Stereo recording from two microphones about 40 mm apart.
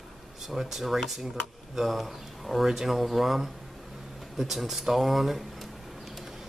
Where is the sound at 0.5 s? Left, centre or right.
Centre.